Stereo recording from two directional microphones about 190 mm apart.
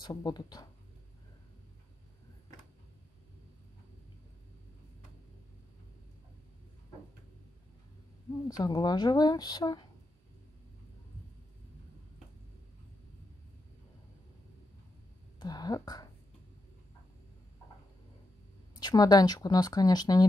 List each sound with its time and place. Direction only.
0.0 s speech: 20° left (ahead or behind)
8.5 s speech: 20° left (ahead or behind)
15.3 s speech: 20° left (ahead or behind)
18.8 s speech: 20° left (ahead or behind)